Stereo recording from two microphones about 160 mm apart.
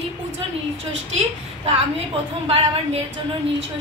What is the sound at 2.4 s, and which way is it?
Speech, 40° right (ahead or behind).